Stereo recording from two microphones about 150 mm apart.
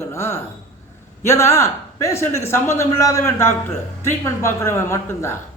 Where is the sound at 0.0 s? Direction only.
20° left (ahead or behind).